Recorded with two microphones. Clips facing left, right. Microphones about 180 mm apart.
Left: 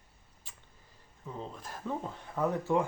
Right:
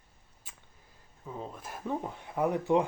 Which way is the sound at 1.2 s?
5° right (ahead or behind).